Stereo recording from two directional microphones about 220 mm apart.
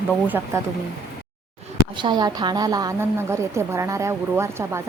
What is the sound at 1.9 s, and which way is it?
A woman's voice, 20° right (ahead or behind).